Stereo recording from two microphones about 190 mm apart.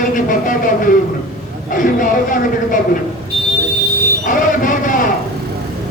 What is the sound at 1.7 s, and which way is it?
A man's voice, 45° left (ahead or behind).